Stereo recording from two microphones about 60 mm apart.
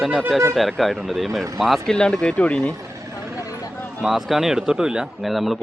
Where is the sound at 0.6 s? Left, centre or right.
Centre.